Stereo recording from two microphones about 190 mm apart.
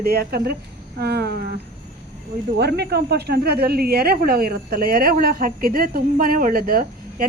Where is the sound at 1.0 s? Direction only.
55° right (ahead or behind).